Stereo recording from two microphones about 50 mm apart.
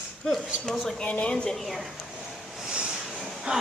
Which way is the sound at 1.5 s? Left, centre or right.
Centre.